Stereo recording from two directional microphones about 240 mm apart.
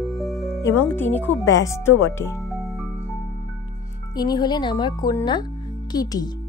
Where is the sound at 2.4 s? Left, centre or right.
Centre.